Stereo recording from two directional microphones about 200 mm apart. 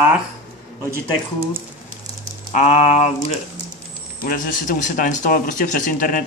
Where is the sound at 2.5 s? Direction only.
35° left (ahead or behind).